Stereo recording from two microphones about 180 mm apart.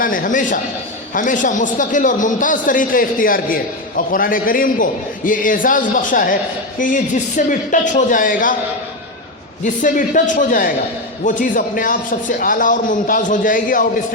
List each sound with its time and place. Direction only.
0.0 s a man's voice: 50° left (ahead or behind)
9.6 s a man's voice: 45° left (ahead or behind)